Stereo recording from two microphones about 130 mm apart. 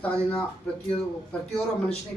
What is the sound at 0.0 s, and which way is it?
Speech, 10° left (ahead or behind).